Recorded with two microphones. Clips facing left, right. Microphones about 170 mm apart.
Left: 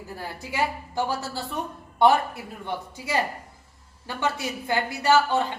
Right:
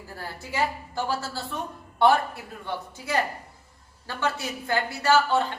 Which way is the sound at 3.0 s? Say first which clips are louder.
Even; 15° left (ahead or behind).